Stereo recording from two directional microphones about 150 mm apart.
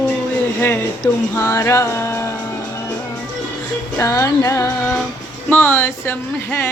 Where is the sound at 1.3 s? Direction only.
20° left (ahead or behind).